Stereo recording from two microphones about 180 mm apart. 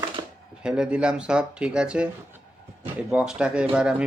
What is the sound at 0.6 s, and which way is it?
Speech, 5° right (ahead or behind).